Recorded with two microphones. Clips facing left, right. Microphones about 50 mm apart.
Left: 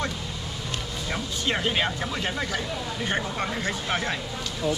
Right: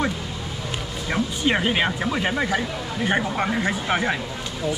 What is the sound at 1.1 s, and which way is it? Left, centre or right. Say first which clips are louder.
Speech: right 6 dB; centre.